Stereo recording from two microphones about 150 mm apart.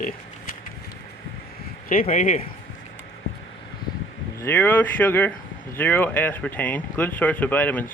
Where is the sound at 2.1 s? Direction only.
60° left (ahead or behind).